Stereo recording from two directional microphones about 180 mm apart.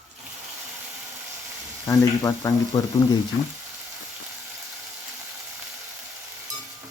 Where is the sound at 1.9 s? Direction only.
20° left (ahead or behind).